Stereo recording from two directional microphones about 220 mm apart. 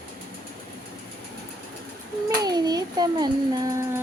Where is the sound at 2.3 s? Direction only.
15° right (ahead or behind).